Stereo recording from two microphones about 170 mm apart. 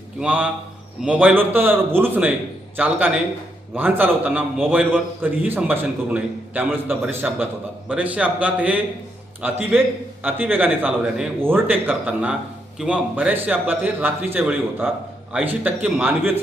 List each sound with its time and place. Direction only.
0.2 s a man's voice: 5° right (ahead or behind)